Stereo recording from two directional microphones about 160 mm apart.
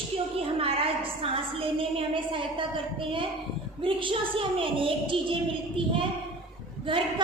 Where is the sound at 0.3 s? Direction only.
35° right (ahead or behind).